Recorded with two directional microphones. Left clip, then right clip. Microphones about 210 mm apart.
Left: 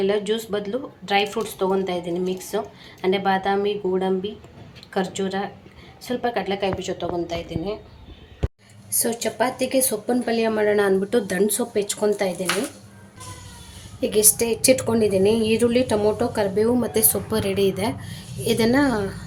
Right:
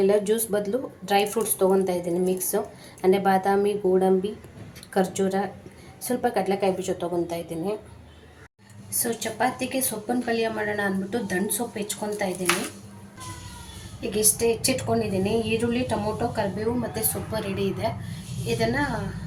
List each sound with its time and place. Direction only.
0.0 s speech: 10° right (ahead or behind)
8.9 s a woman's voice: 45° left (ahead or behind)
14.1 s a woman's voice: 50° left (ahead or behind)